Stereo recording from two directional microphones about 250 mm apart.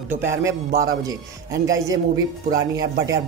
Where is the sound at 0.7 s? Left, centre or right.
Right.